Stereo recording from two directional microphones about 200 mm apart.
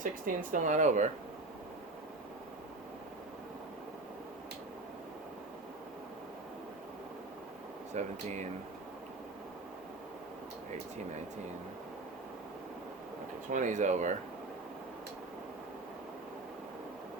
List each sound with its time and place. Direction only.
0.0 s speech: 40° right (ahead or behind)
7.9 s speech: 35° right (ahead or behind)
13.5 s speech: 40° right (ahead or behind)